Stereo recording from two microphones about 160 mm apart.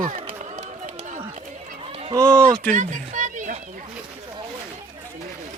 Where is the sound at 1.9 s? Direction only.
40° right (ahead or behind).